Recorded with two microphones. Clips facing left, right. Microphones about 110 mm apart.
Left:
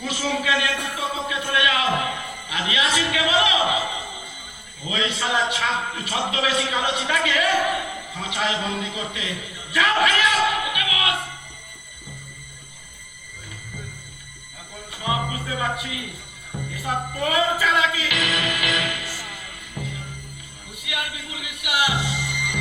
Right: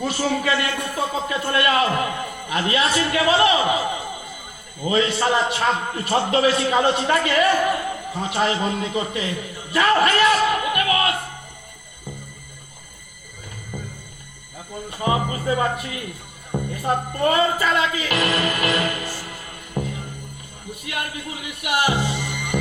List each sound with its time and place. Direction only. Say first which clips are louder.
0.0 s a man's voice: right 3 dB; 40° right (ahead or behind)
14.8 s a man's voice: right 4 dB; 45° right (ahead or behind)